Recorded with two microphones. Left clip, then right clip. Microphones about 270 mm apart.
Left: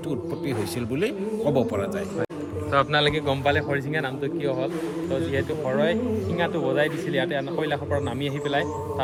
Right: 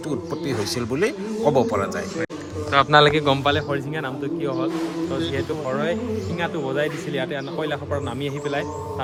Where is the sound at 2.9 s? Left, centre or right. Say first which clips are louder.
Right 7 dB; right.